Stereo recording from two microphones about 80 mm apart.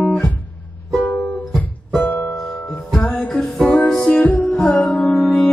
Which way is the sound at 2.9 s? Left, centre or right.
Centre.